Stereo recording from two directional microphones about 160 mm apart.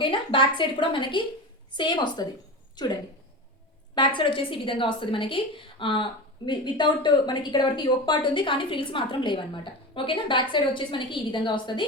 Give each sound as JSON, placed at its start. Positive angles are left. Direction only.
{"t": 0.0, "sound": "a woman's voice", "side_deg": 30}